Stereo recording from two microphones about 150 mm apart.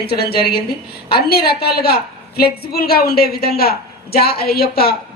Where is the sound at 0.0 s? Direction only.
90° left.